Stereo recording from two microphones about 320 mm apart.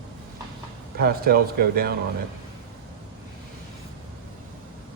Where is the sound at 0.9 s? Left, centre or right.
Right.